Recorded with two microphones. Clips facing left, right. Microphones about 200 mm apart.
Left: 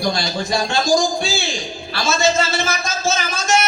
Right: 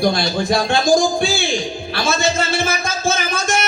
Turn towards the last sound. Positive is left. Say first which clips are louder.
# left 1 dB
turn(degrees=-55)  # may be behind; listen again after turning